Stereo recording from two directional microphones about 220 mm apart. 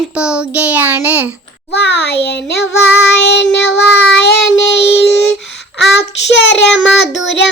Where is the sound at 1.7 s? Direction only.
50° left (ahead or behind).